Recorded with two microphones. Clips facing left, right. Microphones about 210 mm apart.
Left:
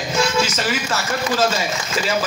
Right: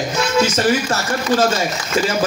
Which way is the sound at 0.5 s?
45° right (ahead or behind).